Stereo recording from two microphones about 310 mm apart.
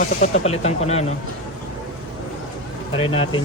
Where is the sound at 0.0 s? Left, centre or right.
Left.